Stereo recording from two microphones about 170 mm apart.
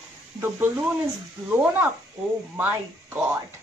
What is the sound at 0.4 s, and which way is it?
A woman's voice, 15° right (ahead or behind).